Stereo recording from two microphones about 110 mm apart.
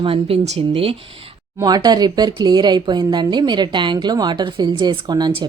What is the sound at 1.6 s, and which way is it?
Speech, 40° right (ahead or behind).